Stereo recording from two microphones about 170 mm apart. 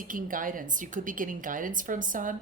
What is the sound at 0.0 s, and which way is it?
A woman's voice, 55° right (ahead or behind).